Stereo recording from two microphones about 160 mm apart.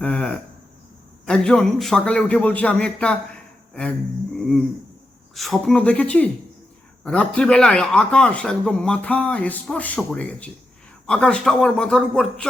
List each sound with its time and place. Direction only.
0.0 s a sound: 5° left (ahead or behind)
1.2 s a man's voice: 5° left (ahead or behind)
4.4 s a man's voice: centre (ahead or behind)